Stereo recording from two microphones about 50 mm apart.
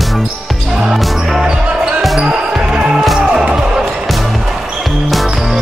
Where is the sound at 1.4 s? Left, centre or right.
Centre.